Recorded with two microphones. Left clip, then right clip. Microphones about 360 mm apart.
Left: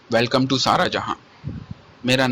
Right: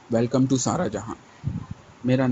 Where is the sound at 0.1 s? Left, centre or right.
Left.